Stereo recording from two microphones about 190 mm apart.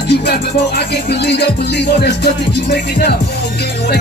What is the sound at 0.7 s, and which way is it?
Music, 60° left (ahead or behind).